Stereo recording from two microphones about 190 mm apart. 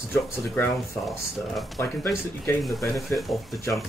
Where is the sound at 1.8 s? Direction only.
15° left (ahead or behind).